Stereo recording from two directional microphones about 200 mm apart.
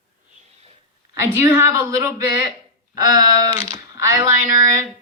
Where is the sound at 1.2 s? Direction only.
10° right (ahead or behind).